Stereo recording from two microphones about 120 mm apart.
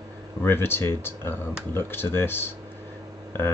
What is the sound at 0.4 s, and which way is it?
Speech, 20° left (ahead or behind).